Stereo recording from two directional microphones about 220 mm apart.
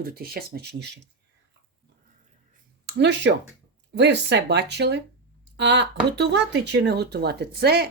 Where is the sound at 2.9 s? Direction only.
50° right (ahead or behind).